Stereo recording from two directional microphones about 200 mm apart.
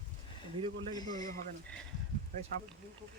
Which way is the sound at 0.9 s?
20° left (ahead or behind).